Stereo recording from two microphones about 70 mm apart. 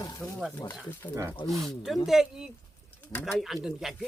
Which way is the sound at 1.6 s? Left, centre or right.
Centre.